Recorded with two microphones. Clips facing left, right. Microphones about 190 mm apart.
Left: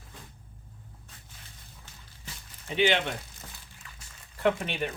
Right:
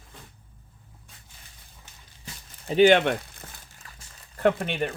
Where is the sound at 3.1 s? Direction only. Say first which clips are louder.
Right 9 dB; 60° right (ahead or behind).